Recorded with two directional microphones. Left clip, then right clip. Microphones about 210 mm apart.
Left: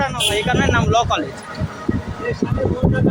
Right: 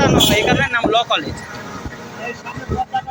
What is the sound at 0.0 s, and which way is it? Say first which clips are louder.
Speech: right 5 dB; 5° left (ahead or behind).